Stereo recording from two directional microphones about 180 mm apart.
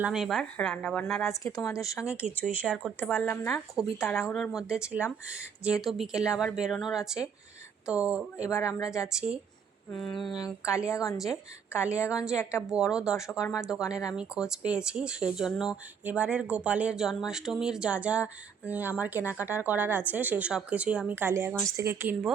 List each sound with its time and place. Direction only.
0.0 s speech: 5° right (ahead or behind)
1.5 s speech: 15° left (ahead or behind)
2.6 s speech: centre (ahead or behind)
3.0 s speech: 10° left (ahead or behind)
4.3 s speech: 5° left (ahead or behind)
8.4 s speech: 15° left (ahead or behind)
9.0 s speech: 5° right (ahead or behind)
10.4 s speech: 15° left (ahead or behind)
12.1 s speech: 5° right (ahead or behind)
12.4 s speech: 15° left (ahead or behind)
12.6 s speech: 5° right (ahead or behind)
13.9 s speech: 20° left (ahead or behind)
14.2 s speech: 5° right (ahead or behind)